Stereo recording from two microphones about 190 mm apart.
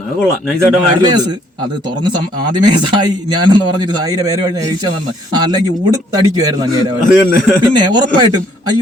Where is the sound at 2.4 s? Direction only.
25° right (ahead or behind).